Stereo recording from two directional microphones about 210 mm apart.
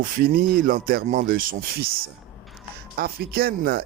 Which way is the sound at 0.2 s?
45° right (ahead or behind).